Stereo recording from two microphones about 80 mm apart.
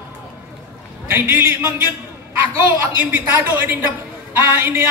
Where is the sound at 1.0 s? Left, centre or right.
Right.